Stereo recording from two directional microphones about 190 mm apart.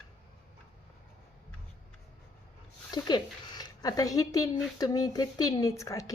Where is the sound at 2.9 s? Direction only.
20° left (ahead or behind).